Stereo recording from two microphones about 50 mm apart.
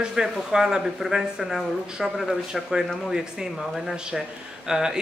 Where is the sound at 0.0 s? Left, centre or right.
Centre.